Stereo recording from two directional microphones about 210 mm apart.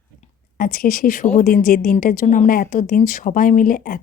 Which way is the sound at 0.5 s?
40° left (ahead or behind).